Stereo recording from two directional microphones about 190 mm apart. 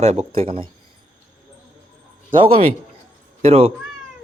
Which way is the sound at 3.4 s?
30° right (ahead or behind).